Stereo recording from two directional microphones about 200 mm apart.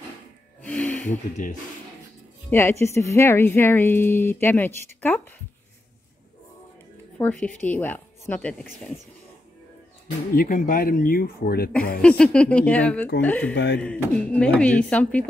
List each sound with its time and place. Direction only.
0.6 s music: 5° left (ahead or behind)
1.3 s speech: 40° left (ahead or behind)
2.5 s a woman's voice: 15° left (ahead or behind)
7.2 s a woman's voice: 5° left (ahead or behind)
10.3 s speech: 45° left (ahead or behind)
12.0 s a woman's voice: 5° left (ahead or behind)